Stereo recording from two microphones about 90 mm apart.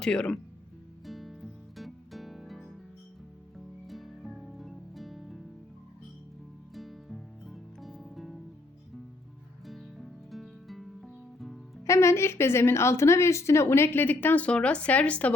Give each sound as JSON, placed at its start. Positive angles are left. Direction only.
{"t": 0.0, "sound": "speech", "side_deg": 10}
{"t": 1.0, "sound": "music", "side_deg": 0}
{"t": 3.8, "sound": "music", "side_deg": 0}
{"t": 6.7, "sound": "music", "side_deg": 0}
{"t": 9.6, "sound": "music", "side_deg": 0}
{"t": 11.9, "sound": "a woman's voice", "side_deg": 30}